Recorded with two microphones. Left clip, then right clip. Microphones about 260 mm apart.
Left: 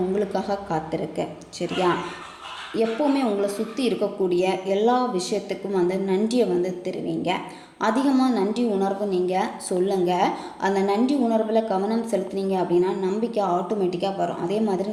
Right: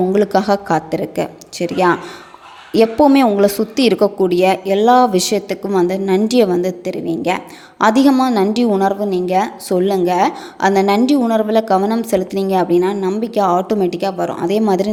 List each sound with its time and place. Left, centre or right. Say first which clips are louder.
0.1 s a woman's voice: right 11 dB; right